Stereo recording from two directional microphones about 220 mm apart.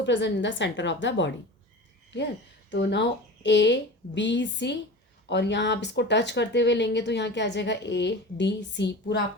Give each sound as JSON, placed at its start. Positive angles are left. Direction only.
{"t": 0.0, "sound": "a woman's voice", "side_deg": 55}